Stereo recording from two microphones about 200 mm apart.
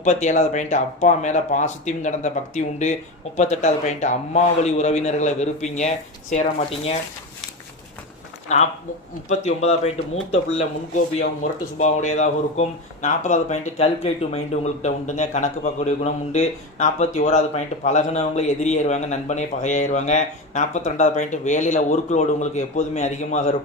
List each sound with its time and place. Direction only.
0.0 s speech: 35° left (ahead or behind)
8.5 s speech: 35° left (ahead or behind)
10.3 s speech: 30° left (ahead or behind)
11.8 s speech: 35° left (ahead or behind)